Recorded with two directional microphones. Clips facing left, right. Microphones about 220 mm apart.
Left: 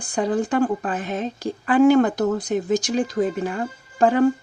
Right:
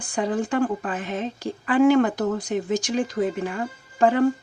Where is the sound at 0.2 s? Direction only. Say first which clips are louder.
Left 2 dB; 40° left (ahead or behind).